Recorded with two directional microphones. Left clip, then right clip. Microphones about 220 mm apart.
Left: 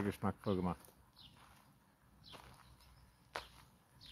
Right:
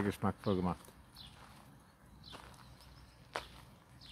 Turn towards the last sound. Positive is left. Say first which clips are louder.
# right 4 dB
turn(degrees=0)  # may be behind; listen again after turning